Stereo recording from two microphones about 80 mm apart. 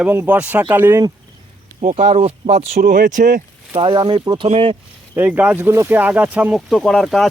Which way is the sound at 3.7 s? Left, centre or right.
Right.